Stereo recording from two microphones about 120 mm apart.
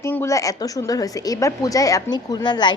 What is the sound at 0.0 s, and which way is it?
A woman's voice, 25° left (ahead or behind).